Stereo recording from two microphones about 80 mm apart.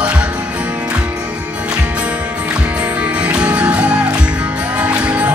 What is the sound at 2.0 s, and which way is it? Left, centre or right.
Music, centre.